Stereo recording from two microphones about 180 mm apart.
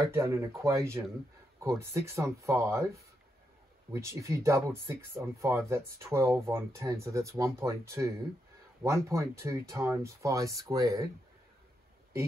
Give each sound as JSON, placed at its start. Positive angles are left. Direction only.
{"t": 0.0, "sound": "speech", "side_deg": -15}